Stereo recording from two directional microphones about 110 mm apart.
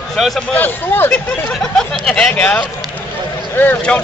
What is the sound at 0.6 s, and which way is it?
Speech, 15° left (ahead or behind).